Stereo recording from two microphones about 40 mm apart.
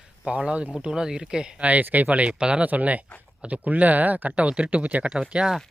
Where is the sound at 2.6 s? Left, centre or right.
Right.